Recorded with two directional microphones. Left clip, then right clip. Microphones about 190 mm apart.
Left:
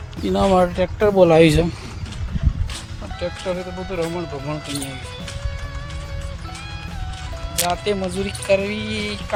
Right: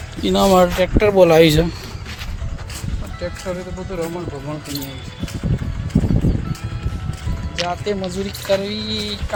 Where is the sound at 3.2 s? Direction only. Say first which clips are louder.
Left 1 dB; centre (ahead or behind).